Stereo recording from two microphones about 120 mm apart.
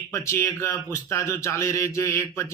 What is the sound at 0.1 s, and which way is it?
Speech, 25° left (ahead or behind).